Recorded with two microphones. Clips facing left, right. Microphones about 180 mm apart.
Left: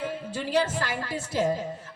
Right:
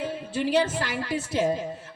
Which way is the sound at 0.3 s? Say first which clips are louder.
Right 3 dB; 20° right (ahead or behind).